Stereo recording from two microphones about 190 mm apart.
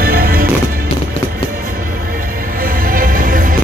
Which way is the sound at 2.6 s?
50° right (ahead or behind).